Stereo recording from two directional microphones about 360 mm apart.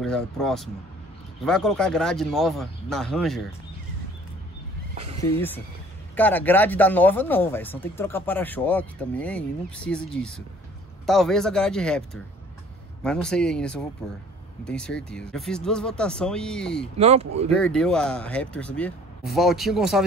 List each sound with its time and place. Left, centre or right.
0.0 s speech: centre
4.9 s horse: centre
5.2 s speech: centre
17.0 s speech: centre
17.6 s speech: centre